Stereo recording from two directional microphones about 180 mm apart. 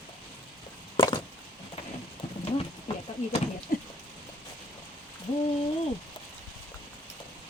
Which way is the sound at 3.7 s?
50° left (ahead or behind).